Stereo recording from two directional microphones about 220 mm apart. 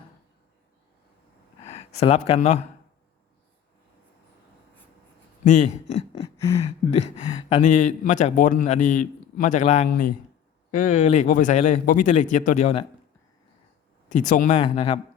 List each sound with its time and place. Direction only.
1.6 s speech: 30° left (ahead or behind)
5.5 s a man's voice: 30° left (ahead or behind)
14.1 s a man's voice: 35° left (ahead or behind)